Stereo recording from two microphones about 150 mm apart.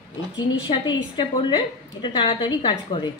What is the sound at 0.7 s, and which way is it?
A woman's voice, 35° left (ahead or behind).